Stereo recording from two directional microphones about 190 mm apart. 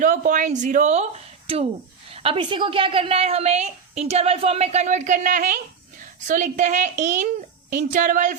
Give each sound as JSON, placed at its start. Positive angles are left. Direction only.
{"t": 0.0, "sound": "a woman's voice", "side_deg": -45}
{"t": 2.1, "sound": "a woman's voice", "side_deg": -30}